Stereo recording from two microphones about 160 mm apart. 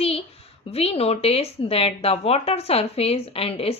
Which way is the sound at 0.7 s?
40° left (ahead or behind).